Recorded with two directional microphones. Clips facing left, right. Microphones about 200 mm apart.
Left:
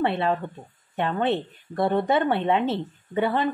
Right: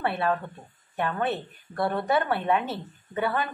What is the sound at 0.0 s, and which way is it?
A woman's voice, 25° left (ahead or behind).